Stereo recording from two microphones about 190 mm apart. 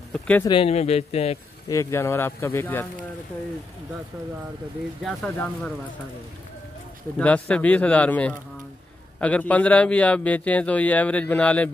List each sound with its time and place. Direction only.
0.1 s a man's voice: 5° left (ahead or behind)
0.5 s speech: 30° left (ahead or behind)
1.7 s a man's voice: 15° left (ahead or behind)
5.0 s speech: 5° left (ahead or behind)
7.2 s a man's voice: 5° left (ahead or behind)